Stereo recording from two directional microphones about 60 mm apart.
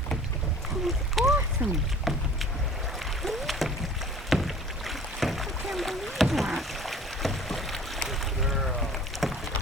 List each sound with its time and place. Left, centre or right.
1.2 s a sound: centre
1.6 s speech: right
2.1 s boat: centre
3.0 s rowboat: centre